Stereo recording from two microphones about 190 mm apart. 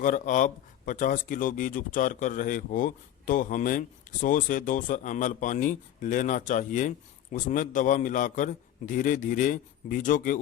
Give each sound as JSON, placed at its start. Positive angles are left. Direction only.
{"t": 0.0, "sound": "speech", "side_deg": 45}